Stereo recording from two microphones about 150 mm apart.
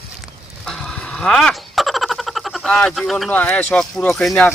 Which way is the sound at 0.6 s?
5° left (ahead or behind).